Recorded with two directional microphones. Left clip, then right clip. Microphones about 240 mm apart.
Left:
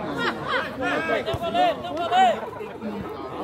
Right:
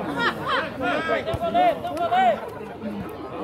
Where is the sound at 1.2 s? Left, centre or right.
Left.